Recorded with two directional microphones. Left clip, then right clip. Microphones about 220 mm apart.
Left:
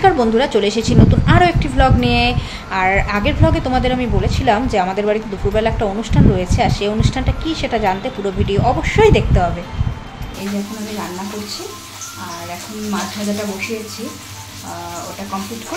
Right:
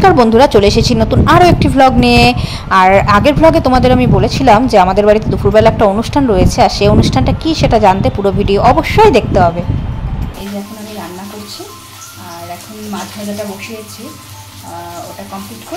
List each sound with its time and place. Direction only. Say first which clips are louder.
0.0 s a woman's voice: right 7 dB; 25° right (ahead or behind)